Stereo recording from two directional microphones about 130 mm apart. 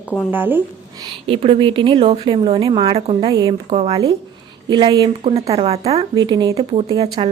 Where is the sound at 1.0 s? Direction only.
40° right (ahead or behind).